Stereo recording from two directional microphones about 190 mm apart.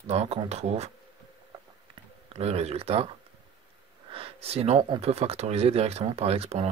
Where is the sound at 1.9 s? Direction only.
30° right (ahead or behind).